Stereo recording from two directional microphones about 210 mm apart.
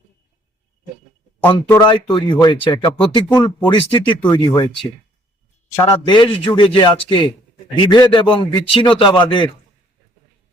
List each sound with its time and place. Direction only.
1.6 s speech: 10° left (ahead or behind)
1.9 s a man's voice: 25° left (ahead or behind)
5.7 s a man's voice: 15° left (ahead or behind)